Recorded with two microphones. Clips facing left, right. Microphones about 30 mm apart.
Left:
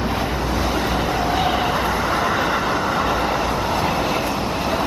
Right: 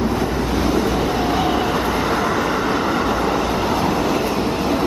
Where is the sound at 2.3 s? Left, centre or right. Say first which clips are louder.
Right 1 dB; centre.